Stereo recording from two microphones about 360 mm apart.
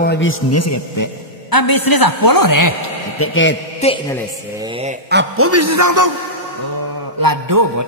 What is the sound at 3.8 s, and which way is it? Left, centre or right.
Speech, centre.